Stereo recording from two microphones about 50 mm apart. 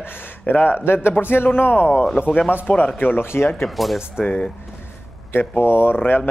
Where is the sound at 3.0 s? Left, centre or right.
Left.